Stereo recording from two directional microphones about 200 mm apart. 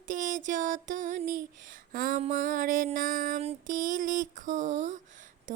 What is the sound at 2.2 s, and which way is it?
Music, 40° right (ahead or behind).